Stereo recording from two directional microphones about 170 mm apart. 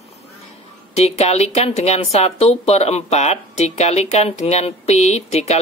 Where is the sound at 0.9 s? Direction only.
40° left (ahead or behind).